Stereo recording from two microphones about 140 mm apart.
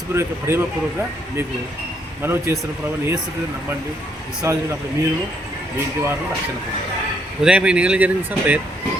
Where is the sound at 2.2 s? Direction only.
20° right (ahead or behind).